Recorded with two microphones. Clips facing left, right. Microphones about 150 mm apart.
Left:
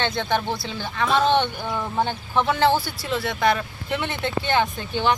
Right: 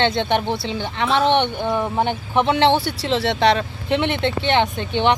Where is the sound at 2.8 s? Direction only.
80° right.